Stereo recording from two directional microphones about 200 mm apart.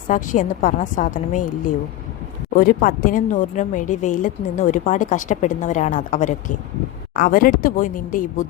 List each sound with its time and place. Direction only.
0.1 s a woman's voice: 40° left (ahead or behind)
2.6 s a woman's voice: 45° left (ahead or behind)